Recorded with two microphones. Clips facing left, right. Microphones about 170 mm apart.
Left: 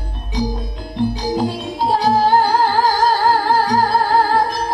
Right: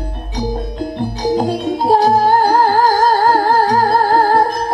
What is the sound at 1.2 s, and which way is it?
Music, 50° right (ahead or behind).